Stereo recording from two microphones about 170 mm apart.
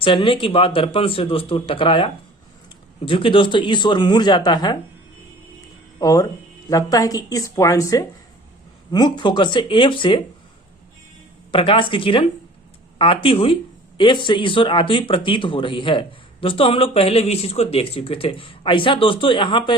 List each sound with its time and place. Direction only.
0.0 s speech: 30° left (ahead or behind)
6.0 s speech: 20° left (ahead or behind)
11.5 s speech: 30° left (ahead or behind)